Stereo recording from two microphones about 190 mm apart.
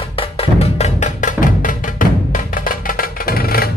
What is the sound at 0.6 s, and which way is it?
Music, 35° left (ahead or behind).